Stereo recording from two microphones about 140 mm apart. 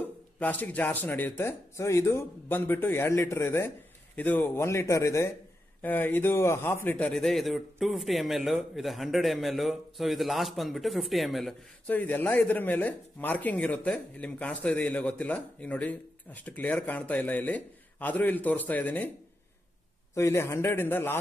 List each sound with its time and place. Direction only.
0.4 s a man's voice: 10° left (ahead or behind)
11.9 s speech: 15° left (ahead or behind)
20.2 s speech: 20° left (ahead or behind)